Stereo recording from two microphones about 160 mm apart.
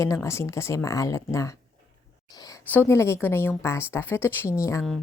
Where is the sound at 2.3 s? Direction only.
20° left (ahead or behind).